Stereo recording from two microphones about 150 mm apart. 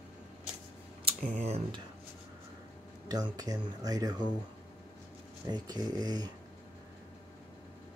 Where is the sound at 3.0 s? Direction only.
25° right (ahead or behind).